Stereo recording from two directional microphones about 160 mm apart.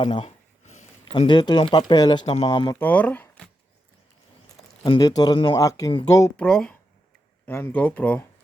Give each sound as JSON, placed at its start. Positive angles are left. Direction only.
{"t": 0.0, "sound": "a sound", "side_deg": 35}
{"t": 1.3, "sound": "speech", "side_deg": 25}
{"t": 2.5, "sound": "speech", "side_deg": 25}
{"t": 2.7, "sound": "speech", "side_deg": 10}
{"t": 4.8, "sound": "speech", "side_deg": 25}
{"t": 6.3, "sound": "speech", "side_deg": 5}